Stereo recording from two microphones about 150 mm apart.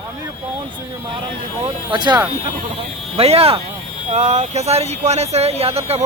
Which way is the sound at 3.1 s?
40° right (ahead or behind).